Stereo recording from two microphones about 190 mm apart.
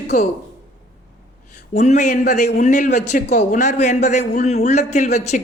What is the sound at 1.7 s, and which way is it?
A man's voice, 40° left (ahead or behind).